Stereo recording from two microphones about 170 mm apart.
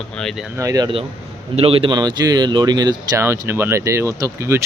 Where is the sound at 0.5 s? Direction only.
20° right (ahead or behind).